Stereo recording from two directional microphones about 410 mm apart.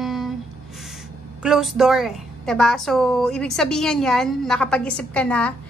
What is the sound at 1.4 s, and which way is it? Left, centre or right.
A woman's voice, centre.